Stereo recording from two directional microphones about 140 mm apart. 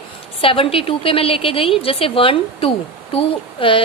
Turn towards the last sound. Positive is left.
turn(degrees=40)  # may be behind; listen again after turning